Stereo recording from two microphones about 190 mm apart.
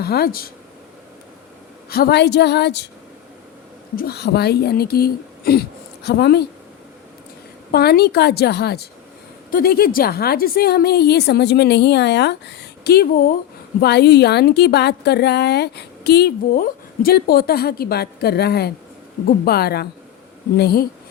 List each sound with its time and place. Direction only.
0.0 s speech: 55° left (ahead or behind)
1.9 s a woman's voice: 60° left (ahead or behind)
3.9 s speech: 55° left (ahead or behind)
7.7 s a woman's voice: 55° left (ahead or behind)